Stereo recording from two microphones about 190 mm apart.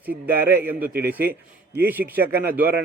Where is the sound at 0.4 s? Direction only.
10° right (ahead or behind).